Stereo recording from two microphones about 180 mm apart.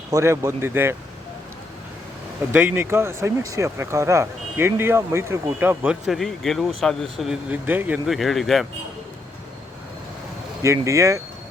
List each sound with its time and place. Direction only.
0.1 s speech: 15° right (ahead or behind)
2.5 s speech: 10° right (ahead or behind)
10.6 s speech: 15° right (ahead or behind)